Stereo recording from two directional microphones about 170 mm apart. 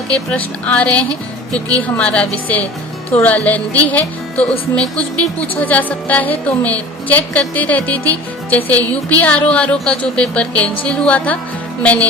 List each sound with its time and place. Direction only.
0.1 s speech: 5° left (ahead or behind)